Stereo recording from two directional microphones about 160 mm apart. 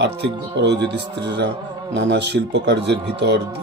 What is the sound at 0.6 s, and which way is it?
Speech, 90° right.